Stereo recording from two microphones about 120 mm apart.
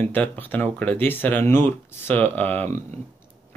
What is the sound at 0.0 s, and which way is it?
Speech, 15° left (ahead or behind).